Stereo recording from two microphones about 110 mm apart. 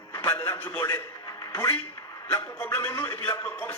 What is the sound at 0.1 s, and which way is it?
A man's voice, 20° left (ahead or behind).